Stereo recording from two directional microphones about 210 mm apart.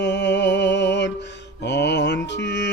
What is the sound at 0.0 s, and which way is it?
Music, 55° left (ahead or behind).